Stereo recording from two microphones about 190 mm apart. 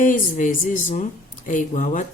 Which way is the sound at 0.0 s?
45° left (ahead or behind).